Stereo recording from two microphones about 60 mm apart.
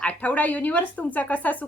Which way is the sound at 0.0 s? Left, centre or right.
Left.